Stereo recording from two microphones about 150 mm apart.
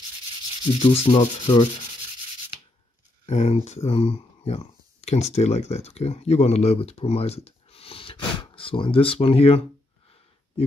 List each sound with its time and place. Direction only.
0.7 s sanding: 40° left (ahead or behind)
3.3 s speech: 45° left (ahead or behind)